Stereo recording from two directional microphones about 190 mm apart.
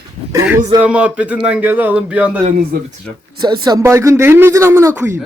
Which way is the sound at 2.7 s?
50° right (ahead or behind).